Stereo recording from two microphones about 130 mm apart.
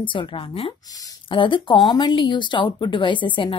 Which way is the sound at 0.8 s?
25° left (ahead or behind).